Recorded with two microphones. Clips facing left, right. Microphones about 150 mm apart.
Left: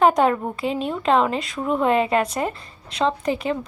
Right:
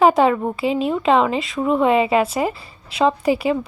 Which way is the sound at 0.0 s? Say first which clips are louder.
Right 3 dB; centre (ahead or behind).